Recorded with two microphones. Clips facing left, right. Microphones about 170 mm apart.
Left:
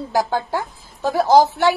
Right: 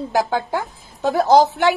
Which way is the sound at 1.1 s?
20° right (ahead or behind).